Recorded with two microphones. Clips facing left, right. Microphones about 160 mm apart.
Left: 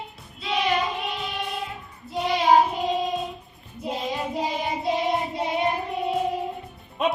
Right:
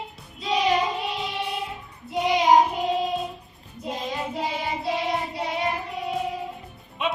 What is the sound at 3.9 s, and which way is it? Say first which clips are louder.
Child singing: left 2 dB; 15° left (ahead or behind).